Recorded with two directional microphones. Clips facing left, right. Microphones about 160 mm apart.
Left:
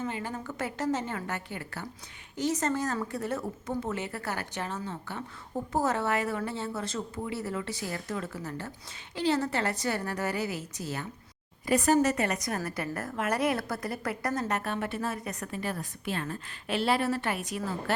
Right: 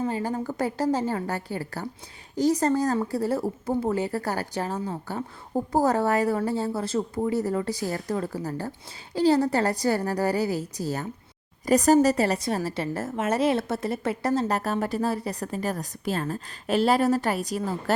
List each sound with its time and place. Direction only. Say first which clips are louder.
0.0 s speech: right 7 dB; 35° right (ahead or behind)